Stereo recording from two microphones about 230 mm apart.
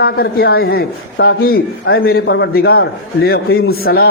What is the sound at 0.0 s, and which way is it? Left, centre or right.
A man's voice, left.